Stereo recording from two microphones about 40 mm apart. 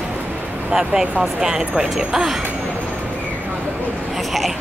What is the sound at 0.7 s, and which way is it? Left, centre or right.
Speech, centre.